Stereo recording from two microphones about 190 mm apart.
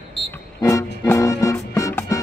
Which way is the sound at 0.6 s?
15° left (ahead or behind).